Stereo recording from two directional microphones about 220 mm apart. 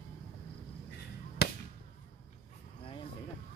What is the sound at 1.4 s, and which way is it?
Fireworks, 45° left (ahead or behind).